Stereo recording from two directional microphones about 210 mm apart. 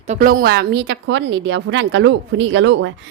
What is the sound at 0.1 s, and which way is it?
A woman's voice, 40° right (ahead or behind).